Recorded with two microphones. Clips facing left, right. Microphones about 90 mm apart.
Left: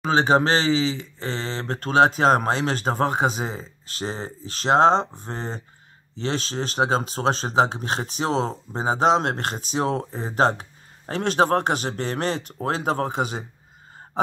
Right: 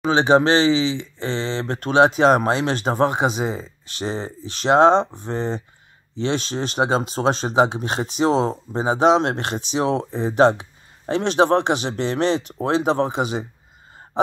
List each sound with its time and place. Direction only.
0.1 s speech: 40° left (ahead or behind)
7.2 s speech: 30° right (ahead or behind)
7.5 s speech: 35° left (ahead or behind)
8.3 s speech: 35° right (ahead or behind)
8.7 s speech: 40° left (ahead or behind)